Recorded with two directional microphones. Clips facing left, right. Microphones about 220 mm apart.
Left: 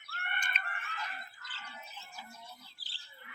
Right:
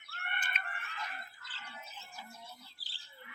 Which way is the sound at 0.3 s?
5° right (ahead or behind).